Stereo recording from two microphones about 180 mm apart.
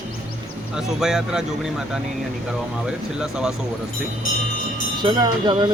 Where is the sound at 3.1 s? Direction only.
5° right (ahead or behind).